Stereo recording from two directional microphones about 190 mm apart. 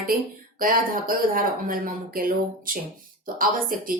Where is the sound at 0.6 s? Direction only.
50° right (ahead or behind).